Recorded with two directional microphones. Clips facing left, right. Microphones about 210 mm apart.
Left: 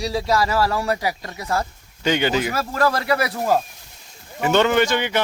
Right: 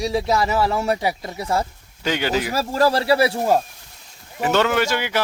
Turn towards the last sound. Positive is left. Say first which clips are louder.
# left 2 dB
turn(degrees=-5)  # may be behind; listen again after turning